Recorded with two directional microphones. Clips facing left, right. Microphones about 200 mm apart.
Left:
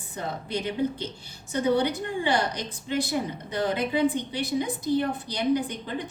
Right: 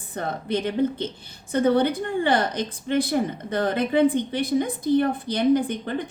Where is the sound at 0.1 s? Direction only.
55° right (ahead or behind).